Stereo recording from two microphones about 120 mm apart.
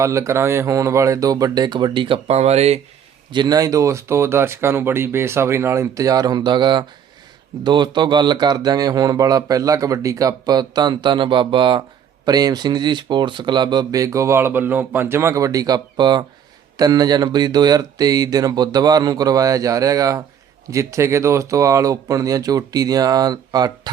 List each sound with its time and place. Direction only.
0.0 s speech: 25° right (ahead or behind); by 2.8 s 65° right (ahead or behind)
3.3 s speech: 35° right (ahead or behind)